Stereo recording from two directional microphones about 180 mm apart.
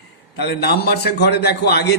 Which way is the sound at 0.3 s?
65° left (ahead or behind).